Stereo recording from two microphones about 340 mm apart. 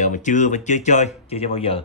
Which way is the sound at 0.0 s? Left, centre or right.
Left.